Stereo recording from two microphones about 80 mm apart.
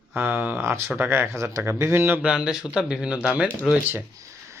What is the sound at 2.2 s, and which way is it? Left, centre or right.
Speech, centre.